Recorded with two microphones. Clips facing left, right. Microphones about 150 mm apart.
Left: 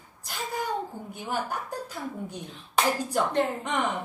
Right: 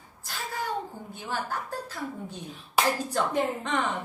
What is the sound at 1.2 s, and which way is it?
Speech, 15° left (ahead or behind).